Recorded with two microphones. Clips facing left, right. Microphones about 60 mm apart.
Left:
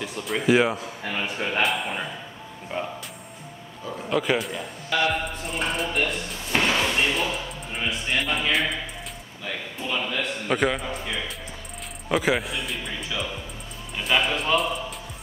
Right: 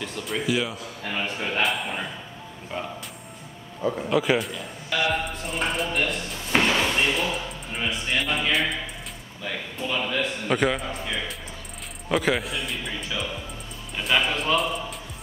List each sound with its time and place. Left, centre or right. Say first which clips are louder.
0.5 s speech: left 9 dB; left
1.0 s a man's voice: even; centre
2.7 s speech: left 2 dB; centre
4.1 s a man's voice: left 1 dB; centre